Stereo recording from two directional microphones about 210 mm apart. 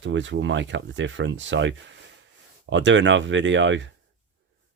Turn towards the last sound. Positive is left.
turn(degrees=-60)  # may be behind; listen again after turning